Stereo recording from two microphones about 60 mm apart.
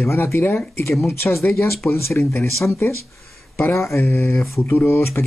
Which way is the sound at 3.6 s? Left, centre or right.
Left.